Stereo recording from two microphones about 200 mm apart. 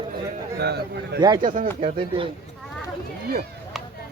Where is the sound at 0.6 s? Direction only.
55° right (ahead or behind).